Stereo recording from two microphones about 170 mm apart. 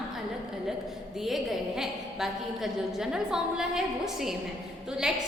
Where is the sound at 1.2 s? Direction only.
Centre (ahead or behind).